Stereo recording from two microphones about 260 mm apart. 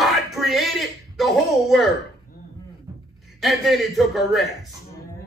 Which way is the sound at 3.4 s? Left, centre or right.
Centre.